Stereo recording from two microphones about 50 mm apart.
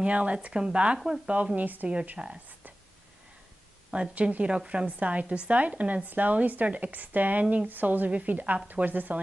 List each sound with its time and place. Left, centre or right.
0.0 s a woman's voice: right
0.9 s speech: centre
1.2 s a woman's voice: right
2.1 s a woman's voice: right
3.9 s a woman's voice: right